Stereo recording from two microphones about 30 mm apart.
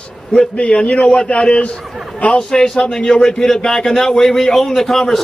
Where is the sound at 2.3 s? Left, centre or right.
Left.